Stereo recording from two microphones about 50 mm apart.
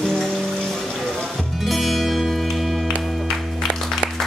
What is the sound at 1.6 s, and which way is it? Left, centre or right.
Music, centre.